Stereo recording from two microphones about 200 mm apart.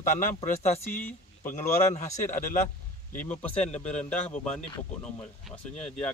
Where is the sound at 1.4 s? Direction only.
35° left (ahead or behind).